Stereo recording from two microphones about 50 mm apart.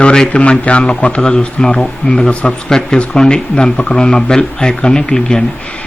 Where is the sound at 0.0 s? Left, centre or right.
Centre.